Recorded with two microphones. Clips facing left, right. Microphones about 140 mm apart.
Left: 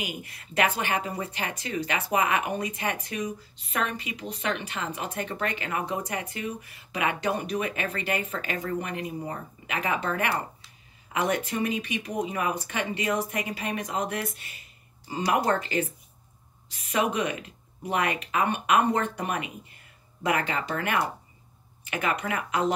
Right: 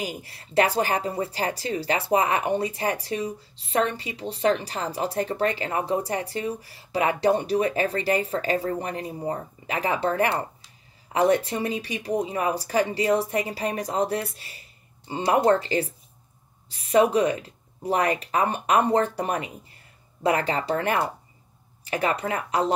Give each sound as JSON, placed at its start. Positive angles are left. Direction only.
{"t": 0.0, "sound": "speech", "side_deg": -35}